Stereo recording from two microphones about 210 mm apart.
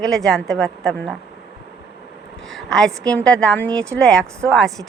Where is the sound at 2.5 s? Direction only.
Centre (ahead or behind).